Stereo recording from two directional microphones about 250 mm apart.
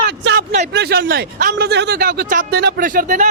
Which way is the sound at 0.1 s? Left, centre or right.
Right.